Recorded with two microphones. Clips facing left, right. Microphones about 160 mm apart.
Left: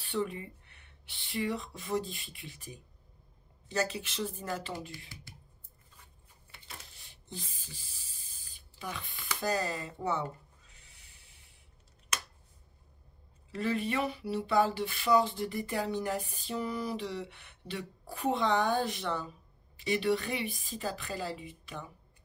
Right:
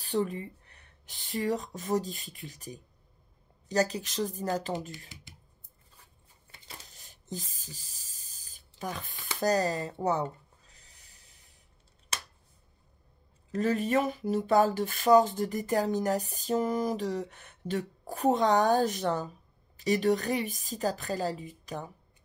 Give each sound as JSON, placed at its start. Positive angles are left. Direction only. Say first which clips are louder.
{"t": 0.0, "sound": "a woman's voice", "louder": "right 4 dB", "side_deg": -40}
{"t": 6.9, "sound": "spray", "louder": "right 10 dB", "side_deg": -40}
{"t": 9.4, "sound": "a woman's voice", "louder": "right 6 dB", "side_deg": -40}
{"t": 9.9, "sound": "a sound", "louder": "right 4 dB", "side_deg": -35}
{"t": 12.1, "sound": "finger snapping", "louder": "left 1 dB", "side_deg": -30}
{"t": 13.5, "sound": "a woman's voice", "louder": "right 5 dB", "side_deg": -40}